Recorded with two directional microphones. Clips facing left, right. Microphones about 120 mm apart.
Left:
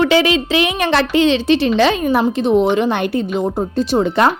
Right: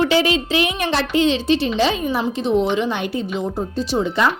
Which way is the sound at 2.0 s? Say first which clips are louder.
Left 5 dB; 55° left (ahead or behind).